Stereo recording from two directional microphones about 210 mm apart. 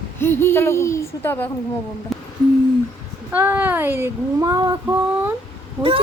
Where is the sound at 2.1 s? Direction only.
Centre (ahead or behind).